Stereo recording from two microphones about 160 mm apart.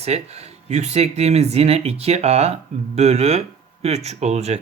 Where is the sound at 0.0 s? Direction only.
40° right (ahead or behind).